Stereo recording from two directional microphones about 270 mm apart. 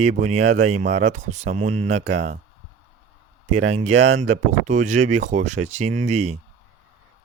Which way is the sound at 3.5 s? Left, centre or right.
Right.